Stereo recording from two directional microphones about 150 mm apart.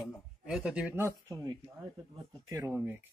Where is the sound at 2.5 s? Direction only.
20° right (ahead or behind).